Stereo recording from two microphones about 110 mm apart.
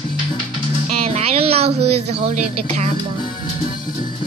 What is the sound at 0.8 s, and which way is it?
Speech, 80° right.